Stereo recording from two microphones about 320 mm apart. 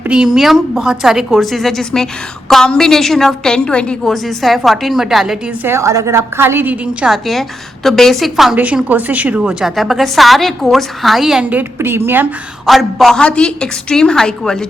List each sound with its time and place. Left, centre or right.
0.0 s a woman's voice: centre